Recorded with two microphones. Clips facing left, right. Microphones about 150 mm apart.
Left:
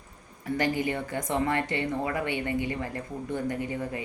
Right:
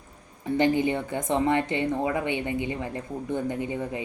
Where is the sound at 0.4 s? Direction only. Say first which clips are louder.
Right 5 dB; 20° right (ahead or behind).